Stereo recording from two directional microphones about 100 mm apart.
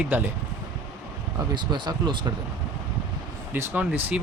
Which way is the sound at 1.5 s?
50° right (ahead or behind).